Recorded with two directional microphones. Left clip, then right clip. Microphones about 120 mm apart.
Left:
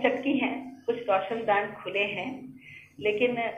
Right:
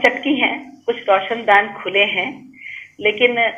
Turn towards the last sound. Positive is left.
turn(degrees=-35)  # may be behind; listen again after turning